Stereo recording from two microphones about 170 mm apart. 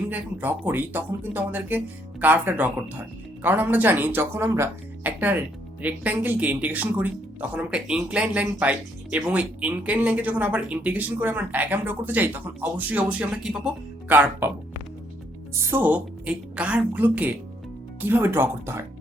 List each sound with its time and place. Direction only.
0.1 s speech: 10° right (ahead or behind)
15.5 s speech: 15° right (ahead or behind)